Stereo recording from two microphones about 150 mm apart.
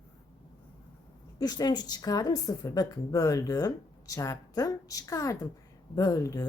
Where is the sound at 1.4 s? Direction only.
25° left (ahead or behind).